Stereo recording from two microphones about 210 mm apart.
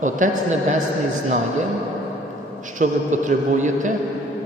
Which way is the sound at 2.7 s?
35° right (ahead or behind).